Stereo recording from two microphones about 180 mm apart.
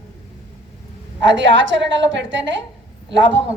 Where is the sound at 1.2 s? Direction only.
90° right.